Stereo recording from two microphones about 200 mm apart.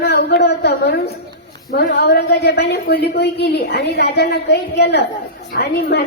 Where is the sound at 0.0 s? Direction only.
55° left (ahead or behind).